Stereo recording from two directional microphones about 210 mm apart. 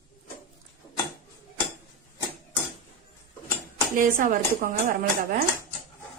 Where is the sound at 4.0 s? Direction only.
40° right (ahead or behind).